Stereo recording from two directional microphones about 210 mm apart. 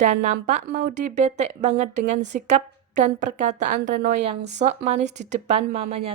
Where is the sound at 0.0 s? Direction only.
35° right (ahead or behind).